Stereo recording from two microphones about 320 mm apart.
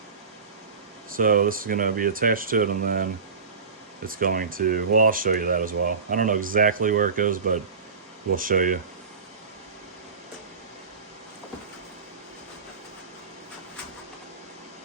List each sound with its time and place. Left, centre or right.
1.1 s speech: right